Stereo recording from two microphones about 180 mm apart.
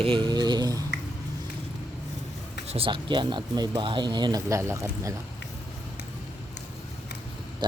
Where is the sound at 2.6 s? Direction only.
30° right (ahead or behind); by 5.1 s 15° right (ahead or behind).